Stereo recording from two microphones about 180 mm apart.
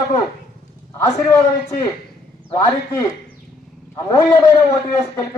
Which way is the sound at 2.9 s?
20° left (ahead or behind).